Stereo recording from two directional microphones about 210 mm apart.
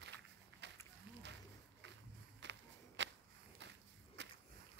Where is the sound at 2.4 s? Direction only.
55° right (ahead or behind).